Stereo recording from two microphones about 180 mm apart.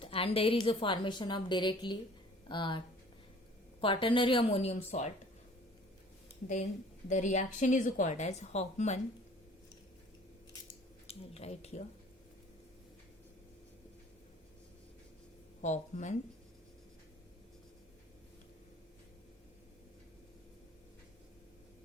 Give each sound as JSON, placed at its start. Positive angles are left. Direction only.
{"t": 0.0, "sound": "a woman's voice", "side_deg": 30}
{"t": 7.1, "sound": "speech", "side_deg": 45}
{"t": 11.0, "sound": "a sound", "side_deg": 35}
{"t": 15.6, "sound": "speech", "side_deg": 40}